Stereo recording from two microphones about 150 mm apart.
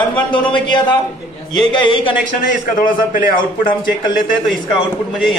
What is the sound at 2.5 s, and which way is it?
Speech, 60° left (ahead or behind).